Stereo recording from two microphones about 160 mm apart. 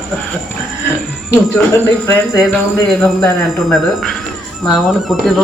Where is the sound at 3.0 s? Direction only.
Centre (ahead or behind).